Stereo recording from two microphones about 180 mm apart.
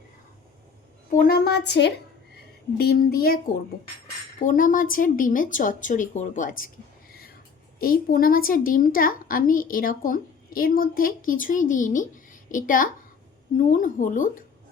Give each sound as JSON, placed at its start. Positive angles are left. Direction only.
{"t": 1.1, "sound": "a woman's voice", "side_deg": 50}
{"t": 2.7, "sound": "a woman's voice", "side_deg": 60}
{"t": 7.1, "sound": "a sound", "side_deg": 55}
{"t": 7.8, "sound": "a woman's voice", "side_deg": 55}